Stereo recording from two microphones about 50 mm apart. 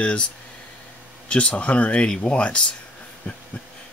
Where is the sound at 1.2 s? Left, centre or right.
Left.